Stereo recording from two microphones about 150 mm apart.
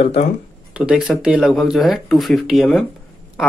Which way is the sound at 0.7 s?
5° right (ahead or behind).